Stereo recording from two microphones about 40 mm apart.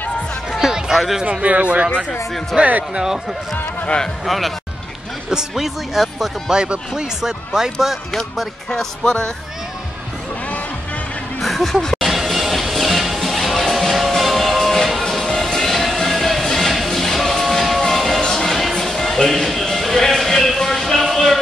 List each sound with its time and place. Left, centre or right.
0.5 s music: centre
0.9 s speech: centre
1.4 s speech: right
2.5 s speech: centre
4.3 s speech: centre
6.5 s speech: right
8.6 s music: centre
11.4 s a sound: centre
11.8 s music: centre
12.1 s music: centre